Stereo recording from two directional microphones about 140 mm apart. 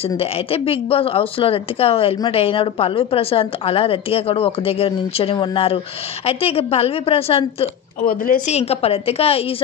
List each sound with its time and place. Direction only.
0.2 s a woman's voice: 40° left (ahead or behind)
8.0 s speech: 90° left
8.5 s a woman's voice: 50° left (ahead or behind)